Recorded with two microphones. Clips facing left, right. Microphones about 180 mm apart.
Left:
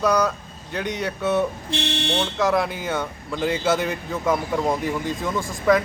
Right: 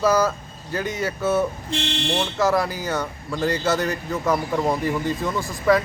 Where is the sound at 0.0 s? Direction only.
5° right (ahead or behind).